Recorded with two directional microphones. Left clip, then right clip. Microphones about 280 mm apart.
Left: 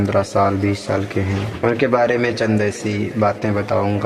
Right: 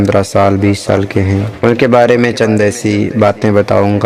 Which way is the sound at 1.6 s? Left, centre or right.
Right.